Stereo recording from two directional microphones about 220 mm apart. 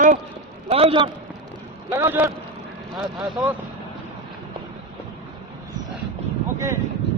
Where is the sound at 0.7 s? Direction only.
25° right (ahead or behind).